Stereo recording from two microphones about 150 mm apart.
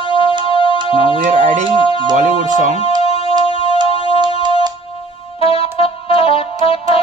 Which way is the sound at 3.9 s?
40° left (ahead or behind).